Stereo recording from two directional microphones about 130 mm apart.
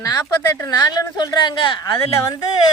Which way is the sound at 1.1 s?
30° left (ahead or behind).